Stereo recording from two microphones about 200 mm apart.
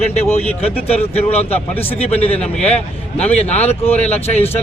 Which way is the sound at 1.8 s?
10° left (ahead or behind).